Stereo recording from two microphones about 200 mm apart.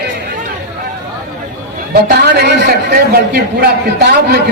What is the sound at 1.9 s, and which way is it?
A man's voice, 50° right (ahead or behind).